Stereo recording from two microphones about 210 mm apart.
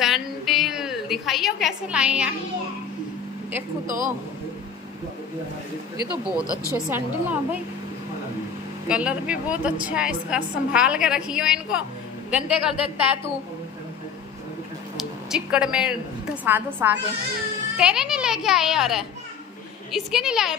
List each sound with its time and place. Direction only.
0.0 s a sound: centre (ahead or behind)
3.8 s a man's voice: 40° right (ahead or behind)
6.7 s a woman's voice: 10° right (ahead or behind)
8.8 s a woman's voice: 5° right (ahead or behind)
15.0 s a woman's voice: 5° right (ahead or behind)